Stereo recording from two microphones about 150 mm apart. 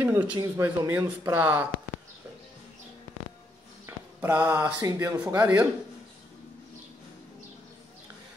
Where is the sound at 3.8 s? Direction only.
15° right (ahead or behind).